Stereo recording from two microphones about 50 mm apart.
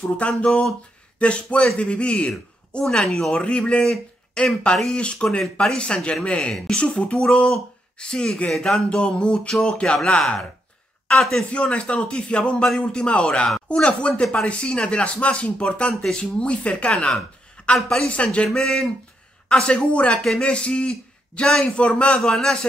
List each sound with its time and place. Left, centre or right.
0.2 s a man's voice: left; by 3.3 s centre
3.3 s a man's voice: centre
8.9 s a man's voice: left
11.5 s a man's voice: left
17.7 s speech: centre
18.1 s a man's voice: left
21.7 s a man's voice: left
22.2 s speech: centre